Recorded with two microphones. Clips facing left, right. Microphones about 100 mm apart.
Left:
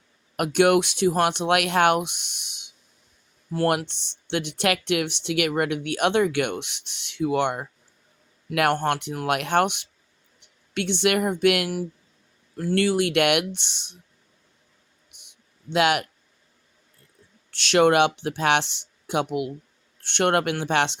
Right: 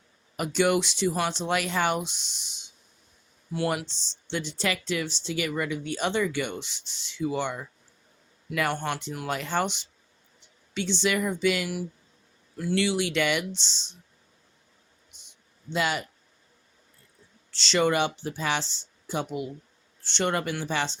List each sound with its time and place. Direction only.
0.3 s speech: 60° left (ahead or behind)
3.8 s speech: 60° left (ahead or behind)
12.5 s speech: 45° left (ahead or behind); by 14.0 s 60° left (ahead or behind)
15.2 s a sound: 65° left (ahead or behind)
17.5 s speech: 60° left (ahead or behind)
20.0 s speech: 60° left (ahead or behind)